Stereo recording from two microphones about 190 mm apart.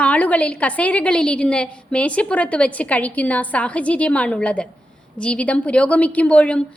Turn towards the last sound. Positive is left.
turn(degrees=5)  # may be behind; listen again after turning